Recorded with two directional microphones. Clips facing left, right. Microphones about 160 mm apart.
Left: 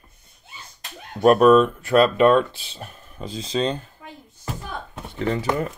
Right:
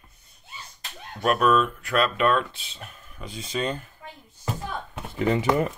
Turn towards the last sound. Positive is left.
turn(degrees=-5)  # may be behind; listen again after turning